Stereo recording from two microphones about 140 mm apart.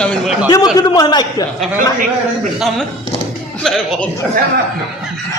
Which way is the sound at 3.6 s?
Centre (ahead or behind).